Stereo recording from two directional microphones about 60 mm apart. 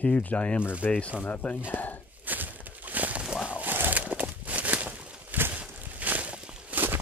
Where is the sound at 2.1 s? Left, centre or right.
Right.